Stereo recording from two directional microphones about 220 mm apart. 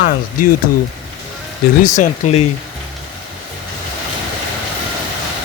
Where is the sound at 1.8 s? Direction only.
35° left (ahead or behind).